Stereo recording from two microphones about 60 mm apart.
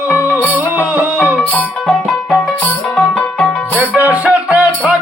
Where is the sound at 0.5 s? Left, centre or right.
Right.